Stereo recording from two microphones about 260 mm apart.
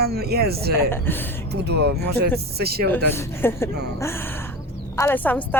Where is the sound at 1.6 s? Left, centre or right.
Right.